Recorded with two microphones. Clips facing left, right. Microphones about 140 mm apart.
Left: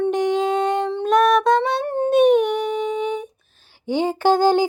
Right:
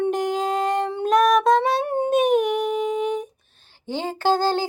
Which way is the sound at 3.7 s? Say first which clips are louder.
Left 7 dB; 15° left (ahead or behind).